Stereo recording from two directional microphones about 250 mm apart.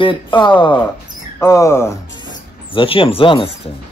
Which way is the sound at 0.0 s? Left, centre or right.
Centre.